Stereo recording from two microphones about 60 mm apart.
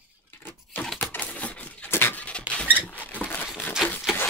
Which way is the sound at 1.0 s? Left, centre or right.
Left.